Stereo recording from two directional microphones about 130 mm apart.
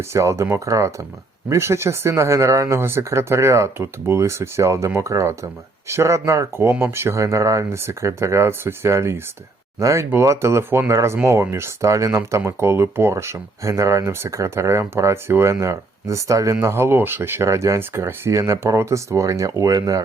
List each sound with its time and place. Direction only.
0.1 s speech: 20° right (ahead or behind)